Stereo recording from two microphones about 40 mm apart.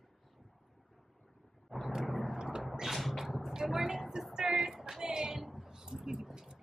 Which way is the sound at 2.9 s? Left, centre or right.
Centre.